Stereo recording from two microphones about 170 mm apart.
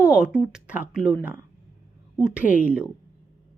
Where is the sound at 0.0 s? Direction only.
5° right (ahead or behind).